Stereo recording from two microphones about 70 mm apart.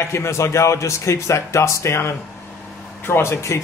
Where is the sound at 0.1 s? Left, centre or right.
Left.